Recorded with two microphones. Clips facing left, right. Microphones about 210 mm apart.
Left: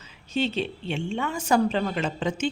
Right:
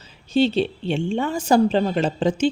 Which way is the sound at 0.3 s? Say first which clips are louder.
Right 8 dB; 30° right (ahead or behind).